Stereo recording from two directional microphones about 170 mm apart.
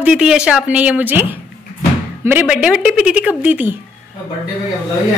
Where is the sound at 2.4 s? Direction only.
5° right (ahead or behind).